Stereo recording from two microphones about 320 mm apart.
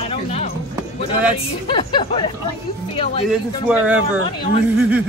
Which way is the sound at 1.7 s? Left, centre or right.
Centre.